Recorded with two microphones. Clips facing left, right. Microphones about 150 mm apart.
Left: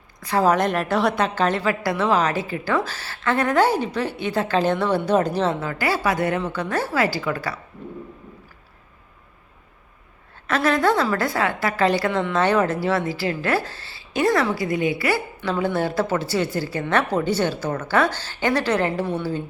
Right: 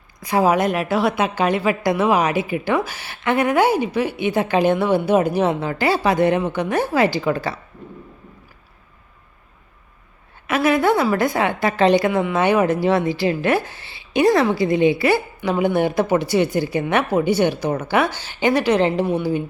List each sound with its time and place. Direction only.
0.2 s a woman's voice: 15° right (ahead or behind)
10.4 s a woman's voice: 10° right (ahead or behind)